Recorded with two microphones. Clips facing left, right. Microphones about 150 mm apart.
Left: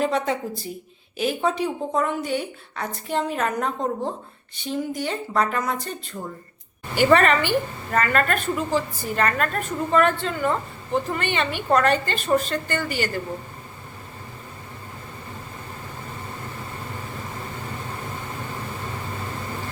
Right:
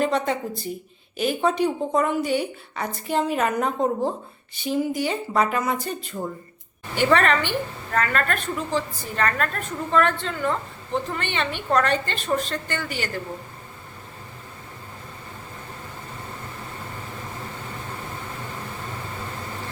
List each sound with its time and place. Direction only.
0.0 s a woman's voice: centre (ahead or behind)
6.9 s a woman's voice: 5° left (ahead or behind)